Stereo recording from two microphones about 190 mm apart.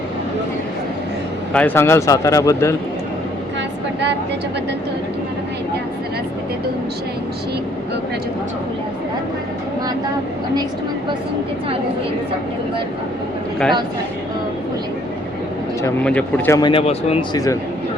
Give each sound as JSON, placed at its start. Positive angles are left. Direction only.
{"t": 1.5, "sound": "speech", "side_deg": 10}
{"t": 16.0, "sound": "speech", "side_deg": 5}
{"t": 16.6, "sound": "speech", "side_deg": 25}
{"t": 17.3, "sound": "speech", "side_deg": 20}